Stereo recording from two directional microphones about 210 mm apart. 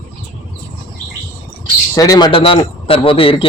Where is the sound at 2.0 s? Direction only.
20° left (ahead or behind).